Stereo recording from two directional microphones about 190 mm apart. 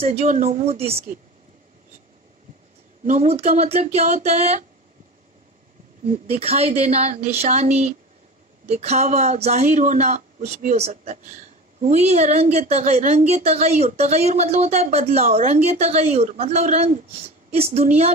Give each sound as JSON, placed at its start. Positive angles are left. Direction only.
{"t": 0.0, "sound": "speech", "side_deg": -35}
{"t": 3.1, "sound": "speech", "side_deg": -35}
{"t": 6.4, "sound": "speech", "side_deg": -35}